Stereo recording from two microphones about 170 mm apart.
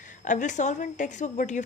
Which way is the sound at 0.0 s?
50° left (ahead or behind).